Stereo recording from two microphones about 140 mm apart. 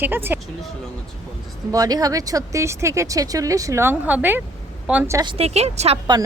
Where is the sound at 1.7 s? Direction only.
25° right (ahead or behind); by 5.1 s 10° right (ahead or behind).